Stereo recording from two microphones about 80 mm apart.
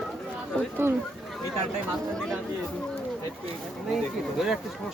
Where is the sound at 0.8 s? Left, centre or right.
Right.